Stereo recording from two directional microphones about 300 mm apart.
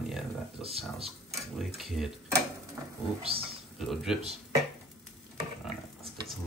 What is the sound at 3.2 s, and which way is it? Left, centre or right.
Speech, centre.